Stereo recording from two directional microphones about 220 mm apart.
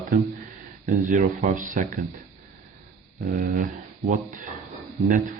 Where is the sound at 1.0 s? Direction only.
35° right (ahead or behind).